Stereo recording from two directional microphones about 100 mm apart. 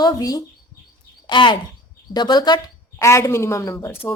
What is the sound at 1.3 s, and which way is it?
Speech, 50° left (ahead or behind).